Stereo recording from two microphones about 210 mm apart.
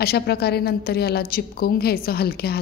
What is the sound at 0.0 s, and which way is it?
A woman's voice, 50° left (ahead or behind).